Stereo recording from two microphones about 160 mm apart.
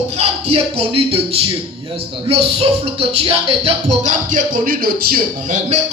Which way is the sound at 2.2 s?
40° right (ahead or behind).